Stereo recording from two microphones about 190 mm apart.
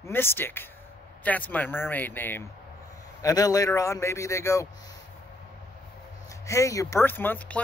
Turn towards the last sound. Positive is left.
turn(degrees=10)  # may be behind; listen again after turning